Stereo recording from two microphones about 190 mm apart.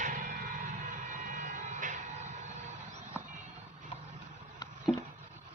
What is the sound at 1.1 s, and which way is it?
Vehicle, 45° right (ahead or behind).